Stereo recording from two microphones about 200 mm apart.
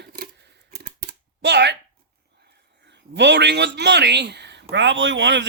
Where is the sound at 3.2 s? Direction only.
60° right (ahead or behind).